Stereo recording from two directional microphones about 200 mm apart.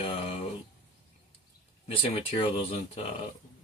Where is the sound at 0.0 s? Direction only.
30° left (ahead or behind).